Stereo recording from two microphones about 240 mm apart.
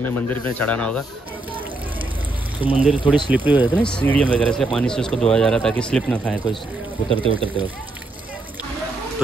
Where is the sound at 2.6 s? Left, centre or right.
Centre.